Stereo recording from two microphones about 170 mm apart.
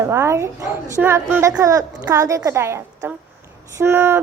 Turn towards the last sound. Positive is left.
turn(degrees=-15)  # may be behind; listen again after turning